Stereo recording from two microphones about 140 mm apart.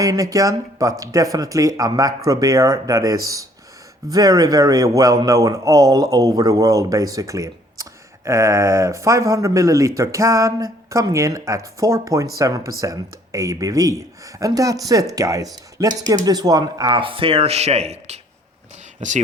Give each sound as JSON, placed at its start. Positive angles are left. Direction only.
{"t": 0.0, "sound": "speech", "side_deg": -25}
{"t": 18.9, "sound": "speech", "side_deg": -60}